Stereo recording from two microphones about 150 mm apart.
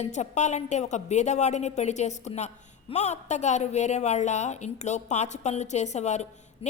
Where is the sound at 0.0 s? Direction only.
50° left (ahead or behind).